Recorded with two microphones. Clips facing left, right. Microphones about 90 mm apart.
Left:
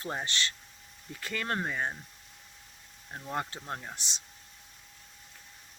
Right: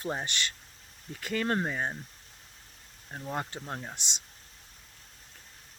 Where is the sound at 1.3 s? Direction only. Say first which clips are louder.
Right 3 dB; 25° right (ahead or behind).